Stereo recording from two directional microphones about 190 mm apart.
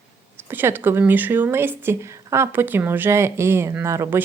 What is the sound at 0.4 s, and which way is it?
Speech, 10° right (ahead or behind).